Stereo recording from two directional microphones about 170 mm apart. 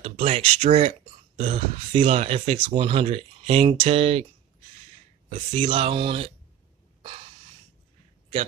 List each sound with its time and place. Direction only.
0.0 s speech: 35° right (ahead or behind)
5.5 s speech: 35° right (ahead or behind)